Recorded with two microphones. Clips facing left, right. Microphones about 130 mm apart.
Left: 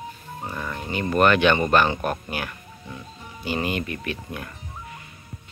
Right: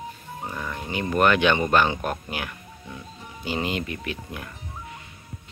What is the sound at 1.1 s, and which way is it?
Speech, 15° right (ahead or behind).